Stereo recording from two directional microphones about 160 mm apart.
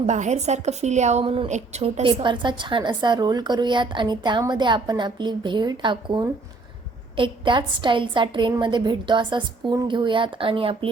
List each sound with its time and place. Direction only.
0.0 s a woman's voice: 45° right (ahead or behind)
1.5 s a woman's voice: 45° right (ahead or behind)